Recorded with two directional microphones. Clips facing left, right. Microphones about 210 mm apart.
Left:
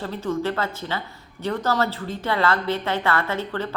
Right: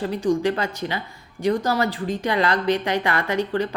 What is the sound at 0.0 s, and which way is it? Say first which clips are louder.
A woman's voice: right 5 dB; 15° right (ahead or behind).